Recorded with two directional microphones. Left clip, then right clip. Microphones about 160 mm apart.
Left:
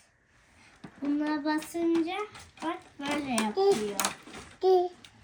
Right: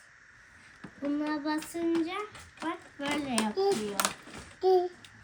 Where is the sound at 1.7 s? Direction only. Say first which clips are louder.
Left 2 dB; 10° right (ahead or behind).